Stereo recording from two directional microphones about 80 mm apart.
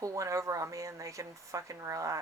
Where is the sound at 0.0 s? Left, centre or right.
Right.